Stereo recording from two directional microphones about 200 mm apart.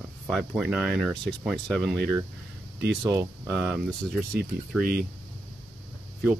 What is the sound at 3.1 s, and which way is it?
Speech, 15° right (ahead or behind).